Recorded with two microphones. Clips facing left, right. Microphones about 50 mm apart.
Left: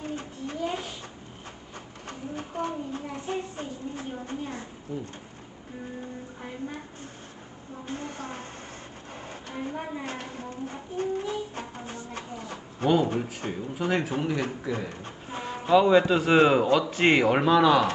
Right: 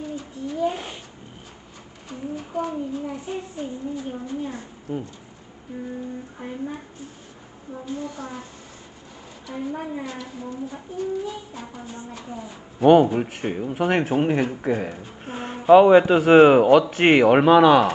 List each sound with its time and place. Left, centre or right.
0.0 s a sound: left
0.7 s a sound: right
2.6 s a woman's voice: left
4.9 s speech: right
7.8 s a woman's voice: left
9.5 s a woman's voice: left
12.8 s speech: right